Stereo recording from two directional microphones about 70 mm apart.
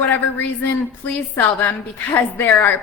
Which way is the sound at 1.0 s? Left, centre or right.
Left.